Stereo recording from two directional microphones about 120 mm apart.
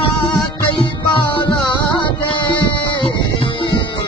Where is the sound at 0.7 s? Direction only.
45° left (ahead or behind).